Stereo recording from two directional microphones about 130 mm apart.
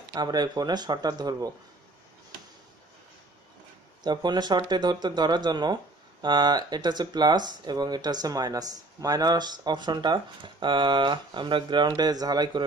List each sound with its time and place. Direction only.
0.1 s speech: 30° right (ahead or behind)
4.0 s speech: 35° right (ahead or behind)